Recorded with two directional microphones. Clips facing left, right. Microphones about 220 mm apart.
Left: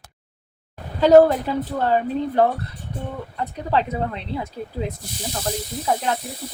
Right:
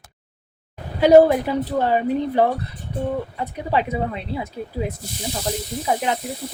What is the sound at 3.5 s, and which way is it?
Speech, 10° right (ahead or behind).